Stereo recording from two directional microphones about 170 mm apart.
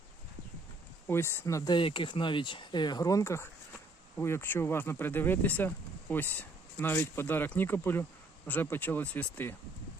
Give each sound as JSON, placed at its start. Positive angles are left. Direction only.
{"t": 1.0, "sound": "speech", "side_deg": 15}